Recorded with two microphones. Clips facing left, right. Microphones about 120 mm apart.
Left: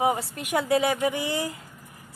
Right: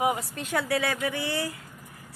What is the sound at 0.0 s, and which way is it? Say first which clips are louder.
Speech: left 2 dB; 30° left (ahead or behind).